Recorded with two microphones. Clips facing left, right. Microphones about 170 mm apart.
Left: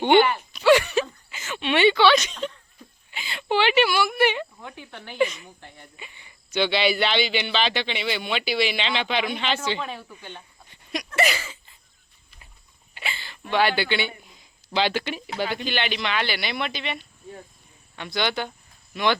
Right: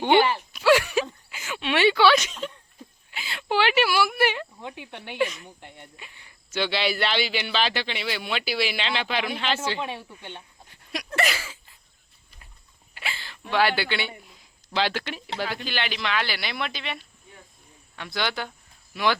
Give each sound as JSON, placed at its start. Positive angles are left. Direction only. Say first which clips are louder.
{"t": 0.5, "sound": "a sound", "louder": "left 2 dB", "side_deg": -5}
{"t": 3.1, "sound": "speech", "louder": "left 2 dB", "side_deg": 0}
{"t": 4.6, "sound": "speech", "louder": "right 2 dB", "side_deg": -20}
{"t": 5.1, "sound": "speech", "louder": "left 3 dB", "side_deg": 0}
{"t": 5.5, "sound": "speech", "louder": "right 1 dB", "side_deg": -20}
{"t": 6.0, "sound": "speech", "louder": "left 3 dB", "side_deg": 0}
{"t": 9.8, "sound": "speech", "louder": "right 1 dB", "side_deg": -25}
{"t": 10.7, "sound": "a sound", "louder": "left 2 dB", "side_deg": 0}
{"t": 12.9, "sound": "a sound", "louder": "left 1 dB", "side_deg": 0}
{"t": 15.4, "sound": "speech", "louder": "left 3 dB", "side_deg": 0}